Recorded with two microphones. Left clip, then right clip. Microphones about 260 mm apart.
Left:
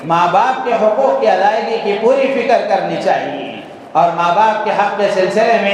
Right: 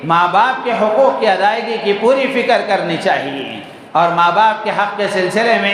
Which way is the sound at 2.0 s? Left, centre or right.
Right.